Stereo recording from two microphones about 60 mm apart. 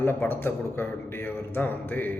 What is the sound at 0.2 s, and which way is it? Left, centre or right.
Speech, left.